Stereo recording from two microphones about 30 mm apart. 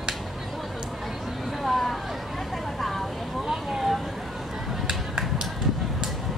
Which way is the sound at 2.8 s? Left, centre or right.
Centre.